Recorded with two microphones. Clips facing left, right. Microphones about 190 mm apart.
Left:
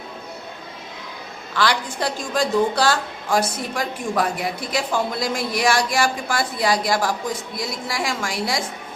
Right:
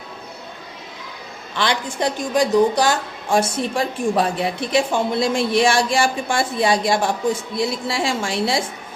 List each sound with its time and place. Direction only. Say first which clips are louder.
1.5 s a woman's voice: even; 20° right (ahead or behind)